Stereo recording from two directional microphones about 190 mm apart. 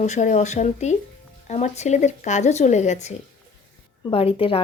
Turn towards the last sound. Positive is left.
turn(degrees=30)  # may be behind; listen again after turning